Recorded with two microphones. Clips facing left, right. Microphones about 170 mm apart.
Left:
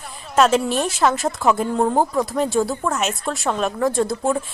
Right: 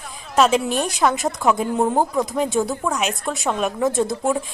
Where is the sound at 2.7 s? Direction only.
Centre (ahead or behind).